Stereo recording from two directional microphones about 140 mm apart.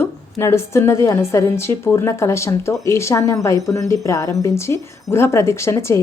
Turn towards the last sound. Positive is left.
turn(degrees=20)  # may be behind; listen again after turning